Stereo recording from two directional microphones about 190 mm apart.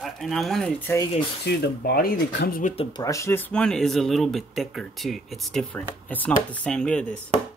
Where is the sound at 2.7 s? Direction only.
20° left (ahead or behind); by 7.2 s 5° left (ahead or behind).